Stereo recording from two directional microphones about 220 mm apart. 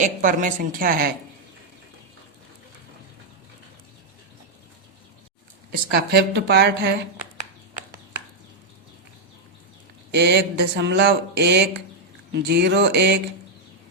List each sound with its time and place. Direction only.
0.0 s a woman's voice: 35° right (ahead or behind)
5.7 s speech: 45° right (ahead or behind)
10.1 s speech: 50° right (ahead or behind)